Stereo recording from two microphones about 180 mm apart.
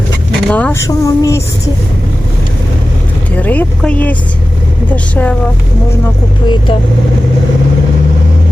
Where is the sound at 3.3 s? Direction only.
10° left (ahead or behind).